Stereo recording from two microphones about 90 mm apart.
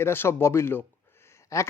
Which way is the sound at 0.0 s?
25° left (ahead or behind).